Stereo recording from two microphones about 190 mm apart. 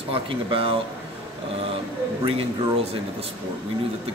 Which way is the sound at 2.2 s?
30° right (ahead or behind).